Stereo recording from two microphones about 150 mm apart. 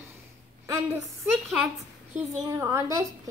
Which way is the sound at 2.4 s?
20° right (ahead or behind).